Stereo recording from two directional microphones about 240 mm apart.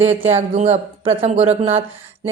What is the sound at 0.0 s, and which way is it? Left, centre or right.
Speech, right.